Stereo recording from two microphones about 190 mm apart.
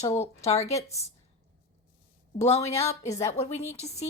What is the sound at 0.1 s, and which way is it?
Speech, 35° left (ahead or behind).